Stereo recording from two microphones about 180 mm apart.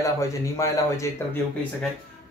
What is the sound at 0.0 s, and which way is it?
Speech, 15° left (ahead or behind).